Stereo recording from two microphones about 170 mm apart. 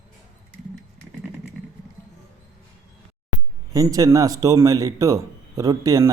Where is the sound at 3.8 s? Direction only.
20° right (ahead or behind).